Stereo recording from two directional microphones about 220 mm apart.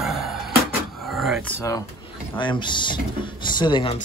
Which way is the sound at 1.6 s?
15° left (ahead or behind).